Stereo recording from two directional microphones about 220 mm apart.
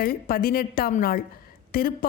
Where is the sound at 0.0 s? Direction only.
40° left (ahead or behind).